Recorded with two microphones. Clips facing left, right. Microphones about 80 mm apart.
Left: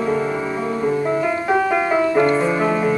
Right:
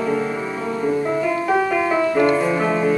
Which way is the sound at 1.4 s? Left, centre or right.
Left.